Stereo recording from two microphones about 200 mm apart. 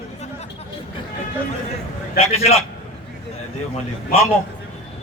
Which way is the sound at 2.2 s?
30° left (ahead or behind).